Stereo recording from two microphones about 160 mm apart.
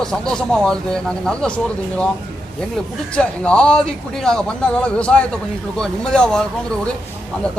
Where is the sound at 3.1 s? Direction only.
5° left (ahead or behind).